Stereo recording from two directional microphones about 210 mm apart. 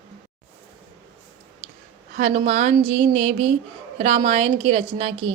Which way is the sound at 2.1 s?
35° right (ahead or behind).